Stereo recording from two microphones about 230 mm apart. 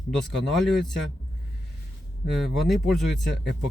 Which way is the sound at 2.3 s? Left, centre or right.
Centre.